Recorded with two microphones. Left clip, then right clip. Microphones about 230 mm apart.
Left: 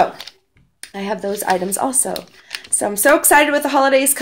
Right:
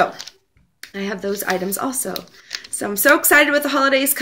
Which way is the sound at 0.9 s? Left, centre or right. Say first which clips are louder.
Left 2 dB; centre.